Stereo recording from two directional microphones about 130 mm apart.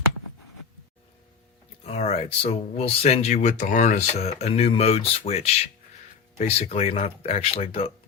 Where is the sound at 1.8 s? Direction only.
55° left (ahead or behind).